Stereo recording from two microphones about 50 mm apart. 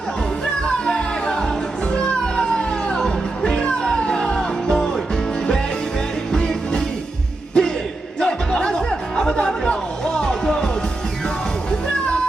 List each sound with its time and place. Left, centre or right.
0.6 s music: centre
6.3 s music: centre